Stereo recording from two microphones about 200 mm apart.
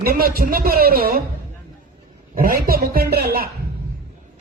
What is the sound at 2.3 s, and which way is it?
A man's voice, 45° right (ahead or behind).